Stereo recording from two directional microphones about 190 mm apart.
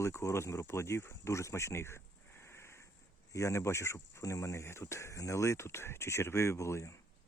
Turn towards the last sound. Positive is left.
turn(degrees=15)  # may be behind; listen again after turning